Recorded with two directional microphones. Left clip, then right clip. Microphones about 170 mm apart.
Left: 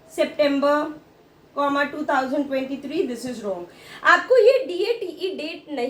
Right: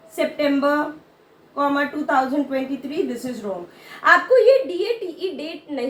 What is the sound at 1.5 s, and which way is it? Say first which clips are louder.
A woman's voice: right 1 dB; 20° left (ahead or behind).